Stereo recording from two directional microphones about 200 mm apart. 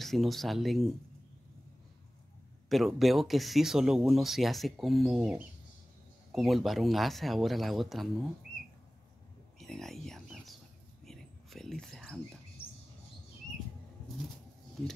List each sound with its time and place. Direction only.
0.0 s speech: centre (ahead or behind)
2.7 s speech: centre (ahead or behind)
9.6 s a sound: centre (ahead or behind)
11.1 s whispering: centre (ahead or behind)